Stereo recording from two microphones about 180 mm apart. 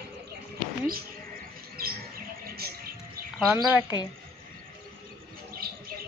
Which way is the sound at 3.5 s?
10° right (ahead or behind).